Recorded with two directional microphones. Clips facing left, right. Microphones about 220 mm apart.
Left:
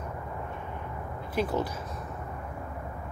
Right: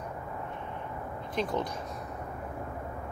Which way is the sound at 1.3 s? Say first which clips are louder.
Left 3 dB; 5° left (ahead or behind).